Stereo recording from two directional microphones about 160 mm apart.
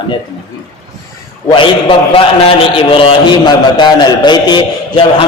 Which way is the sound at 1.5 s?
30° left (ahead or behind).